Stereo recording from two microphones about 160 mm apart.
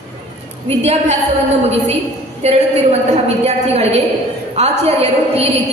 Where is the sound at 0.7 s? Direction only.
40° right (ahead or behind).